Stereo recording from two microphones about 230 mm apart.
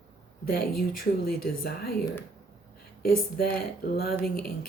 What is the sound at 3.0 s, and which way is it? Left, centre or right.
Speech, left.